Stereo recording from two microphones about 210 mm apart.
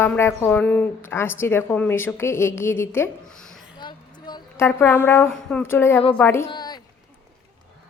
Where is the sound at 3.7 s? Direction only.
20° left (ahead or behind).